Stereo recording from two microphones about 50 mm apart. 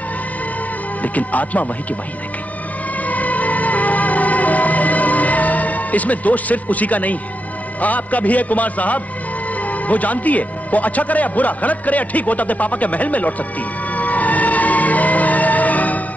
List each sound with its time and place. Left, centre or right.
1.0 s a man's voice: left
3.0 s music: left
7.8 s a man's voice: left
13.9 s music: left